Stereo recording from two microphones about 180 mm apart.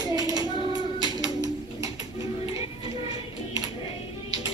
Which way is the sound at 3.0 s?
20° right (ahead or behind).